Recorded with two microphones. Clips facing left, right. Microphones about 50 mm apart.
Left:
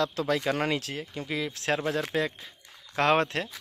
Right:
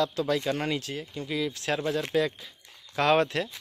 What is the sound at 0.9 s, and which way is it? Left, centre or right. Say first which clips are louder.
Speech: even; left.